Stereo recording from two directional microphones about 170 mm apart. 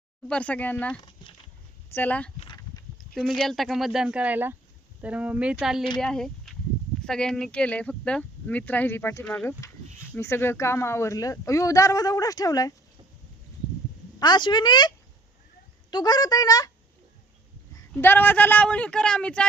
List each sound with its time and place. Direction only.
0.3 s speech: 10° left (ahead or behind)
2.0 s speech: 10° left (ahead or behind)
14.2 s speech: 25° left (ahead or behind)
17.9 s speech: 10° left (ahead or behind)